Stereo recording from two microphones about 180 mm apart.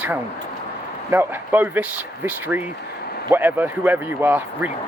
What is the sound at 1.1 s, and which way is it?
Speech, 10° right (ahead or behind).